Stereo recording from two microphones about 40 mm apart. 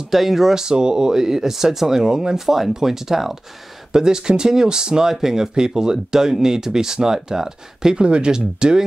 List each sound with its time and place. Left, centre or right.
0.1 s speech: centre
8.0 s speech: right